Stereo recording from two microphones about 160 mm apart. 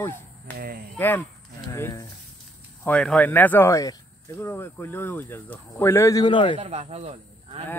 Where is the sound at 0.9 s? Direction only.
10° left (ahead or behind).